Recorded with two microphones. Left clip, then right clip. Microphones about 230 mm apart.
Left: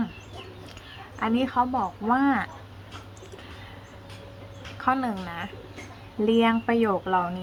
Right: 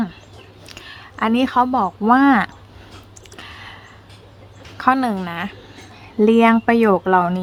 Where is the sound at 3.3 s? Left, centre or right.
Right.